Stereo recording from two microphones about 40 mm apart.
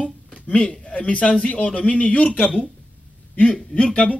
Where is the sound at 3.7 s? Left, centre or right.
Left.